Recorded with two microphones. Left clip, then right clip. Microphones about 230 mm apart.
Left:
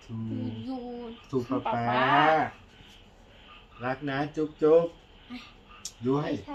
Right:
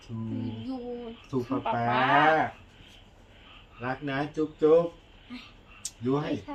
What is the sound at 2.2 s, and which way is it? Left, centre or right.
Speech, centre.